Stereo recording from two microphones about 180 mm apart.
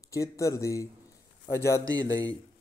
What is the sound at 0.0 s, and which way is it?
Speech, 20° left (ahead or behind).